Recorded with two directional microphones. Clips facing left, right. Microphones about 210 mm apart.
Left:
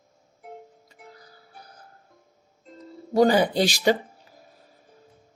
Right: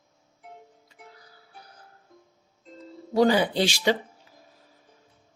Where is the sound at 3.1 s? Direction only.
45° left (ahead or behind).